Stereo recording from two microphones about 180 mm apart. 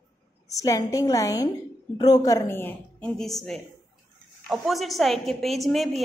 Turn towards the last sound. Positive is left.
turn(degrees=0)  # may be behind; listen again after turning